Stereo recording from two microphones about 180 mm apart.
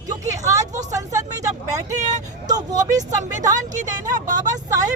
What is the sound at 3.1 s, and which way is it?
Speech, 20° right (ahead or behind).